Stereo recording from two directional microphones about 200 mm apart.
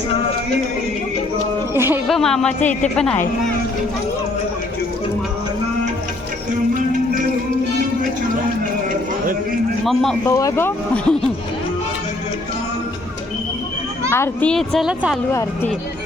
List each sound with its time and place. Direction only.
1.7 s speech: 10° right (ahead or behind)
2.0 s a child's voice: centre (ahead or behind)
2.6 s a woman's voice: 35° left (ahead or behind)
2.9 s a child's voice: 5° left (ahead or behind)
9.8 s a child's voice: centre (ahead or behind)
10.2 s speech: 15° left (ahead or behind)
14.1 s a child's voice: 10° left (ahead or behind)
15.3 s speech: 15° left (ahead or behind)